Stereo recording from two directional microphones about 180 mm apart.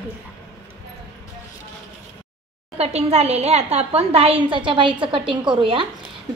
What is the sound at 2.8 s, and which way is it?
A woman's voice, 35° right (ahead or behind).